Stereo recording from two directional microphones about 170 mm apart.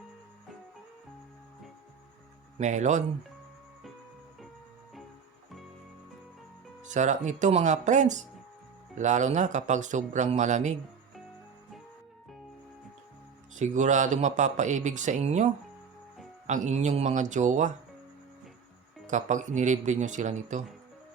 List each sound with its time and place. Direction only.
2.6 s speech: 45° right (ahead or behind)
6.9 s speech: 45° right (ahead or behind)
13.6 s speech: 45° right (ahead or behind)
16.5 s speech: 45° right (ahead or behind)
19.0 s speech: 45° right (ahead or behind)